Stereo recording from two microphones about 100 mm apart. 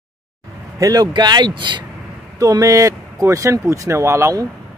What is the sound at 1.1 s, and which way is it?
Speech, 45° right (ahead or behind).